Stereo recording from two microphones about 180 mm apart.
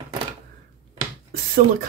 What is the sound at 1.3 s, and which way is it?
Speech, 50° right (ahead or behind).